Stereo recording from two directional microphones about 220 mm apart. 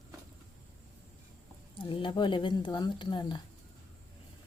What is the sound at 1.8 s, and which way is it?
A woman's voice, 25° left (ahead or behind).